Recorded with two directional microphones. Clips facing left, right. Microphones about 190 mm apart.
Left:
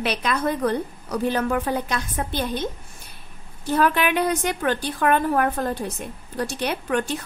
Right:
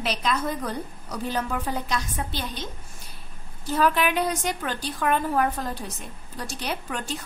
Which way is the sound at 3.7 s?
60° left (ahead or behind).